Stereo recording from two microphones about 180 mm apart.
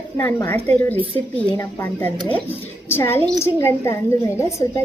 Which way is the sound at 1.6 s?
15° left (ahead or behind).